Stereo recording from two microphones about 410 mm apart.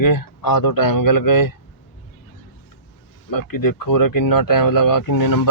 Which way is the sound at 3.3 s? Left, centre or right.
Left.